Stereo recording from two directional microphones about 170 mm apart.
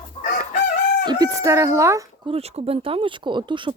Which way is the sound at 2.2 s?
35° right (ahead or behind).